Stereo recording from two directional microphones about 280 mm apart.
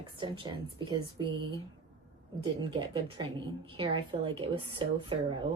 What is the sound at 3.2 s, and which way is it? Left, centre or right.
A woman's voice, centre.